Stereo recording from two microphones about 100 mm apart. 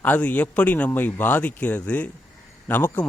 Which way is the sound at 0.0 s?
15° left (ahead or behind).